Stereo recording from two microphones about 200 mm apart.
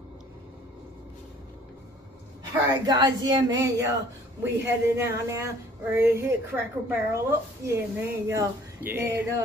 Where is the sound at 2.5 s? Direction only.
20° right (ahead or behind).